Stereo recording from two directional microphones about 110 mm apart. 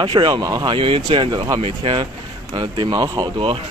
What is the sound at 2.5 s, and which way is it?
Speech, 45° right (ahead or behind).